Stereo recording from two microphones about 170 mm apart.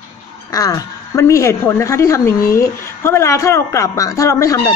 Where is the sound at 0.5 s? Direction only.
20° left (ahead or behind).